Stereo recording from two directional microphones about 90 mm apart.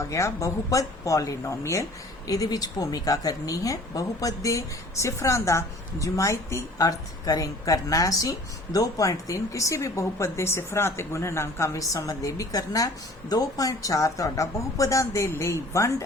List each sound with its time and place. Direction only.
0.0 s speech: 35° left (ahead or behind)